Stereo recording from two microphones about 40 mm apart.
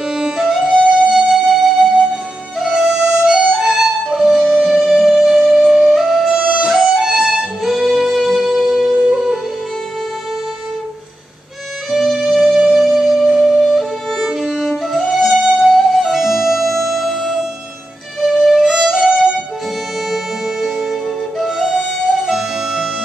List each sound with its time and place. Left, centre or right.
0.1 s music: centre
6.2 s music: right
6.7 s music: centre
11.9 s music: centre
12.5 s music: centre
13.4 s music: centre
14.1 s music: centre
18.6 s music: centre